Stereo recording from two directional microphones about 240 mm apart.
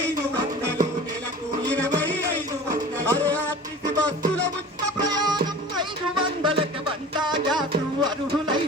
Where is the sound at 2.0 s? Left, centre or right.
Centre.